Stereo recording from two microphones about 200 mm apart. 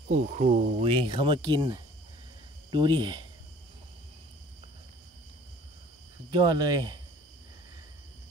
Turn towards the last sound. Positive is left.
turn(degrees=-20)  # may be behind; listen again after turning